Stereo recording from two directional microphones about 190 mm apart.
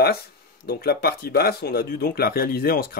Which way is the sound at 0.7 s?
55° left (ahead or behind).